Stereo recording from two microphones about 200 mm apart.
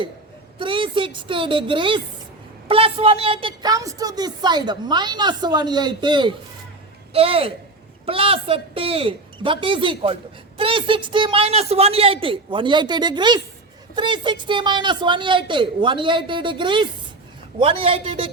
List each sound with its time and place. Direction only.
0.6 s a woman's voice: 25° right (ahead or behind)